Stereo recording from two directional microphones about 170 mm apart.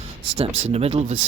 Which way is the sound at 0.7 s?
35° right (ahead or behind).